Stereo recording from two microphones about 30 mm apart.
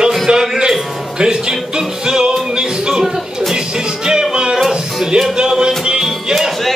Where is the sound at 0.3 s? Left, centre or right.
Right.